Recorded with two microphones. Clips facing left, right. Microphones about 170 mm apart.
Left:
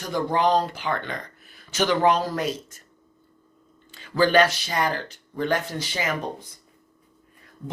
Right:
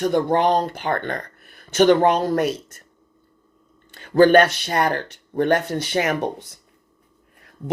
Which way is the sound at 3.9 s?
55° right (ahead or behind).